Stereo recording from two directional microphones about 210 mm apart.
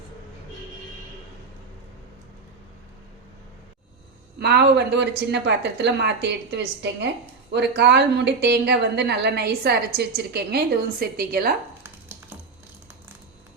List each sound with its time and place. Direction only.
4.4 s a woman's voice: 50° right (ahead or behind)
11.8 s dog: 10° right (ahead or behind)